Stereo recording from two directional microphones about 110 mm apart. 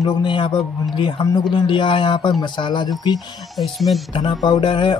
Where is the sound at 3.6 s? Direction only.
Centre (ahead or behind).